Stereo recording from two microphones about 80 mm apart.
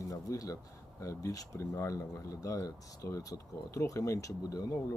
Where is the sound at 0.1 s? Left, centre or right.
Left.